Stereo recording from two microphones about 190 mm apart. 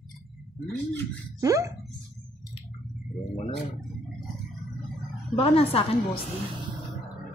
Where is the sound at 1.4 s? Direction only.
15° right (ahead or behind).